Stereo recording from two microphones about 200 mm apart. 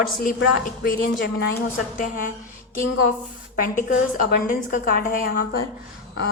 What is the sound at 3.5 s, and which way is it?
A woman's voice, 45° left (ahead or behind).